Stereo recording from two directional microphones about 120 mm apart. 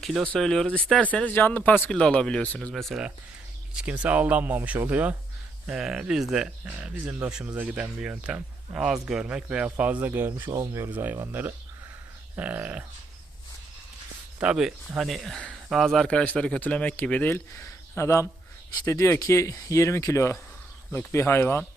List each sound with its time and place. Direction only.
0.0 s speech: centre (ahead or behind)
3.8 s speech: 10° right (ahead or behind)
14.3 s speech: 10° right (ahead or behind); by 21.7 s 20° left (ahead or behind)